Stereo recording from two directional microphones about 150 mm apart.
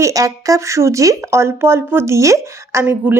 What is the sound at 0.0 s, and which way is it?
Speech, 20° right (ahead or behind).